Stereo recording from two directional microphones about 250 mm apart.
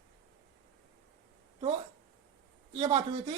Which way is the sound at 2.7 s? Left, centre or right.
Centre.